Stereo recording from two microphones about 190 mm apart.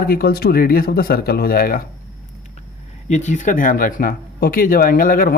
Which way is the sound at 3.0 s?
40° left (ahead or behind).